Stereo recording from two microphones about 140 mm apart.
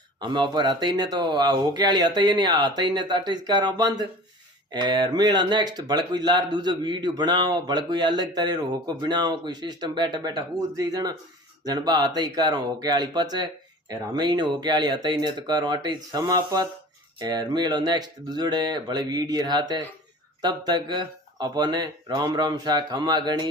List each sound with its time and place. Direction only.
0.2 s speech: 35° right (ahead or behind)